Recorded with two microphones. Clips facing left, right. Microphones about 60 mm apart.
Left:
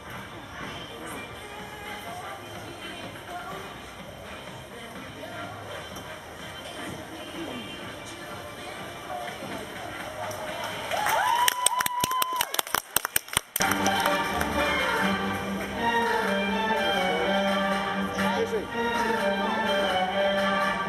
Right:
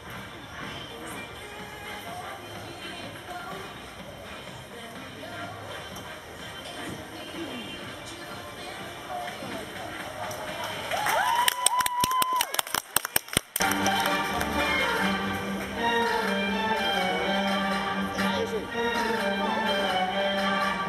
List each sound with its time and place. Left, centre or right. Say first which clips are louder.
9.2 s a sound: even; centre
13.6 s music: left 1 dB; centre
18.3 s music: left 2 dB; centre
18.6 s music: left 1 dB; centre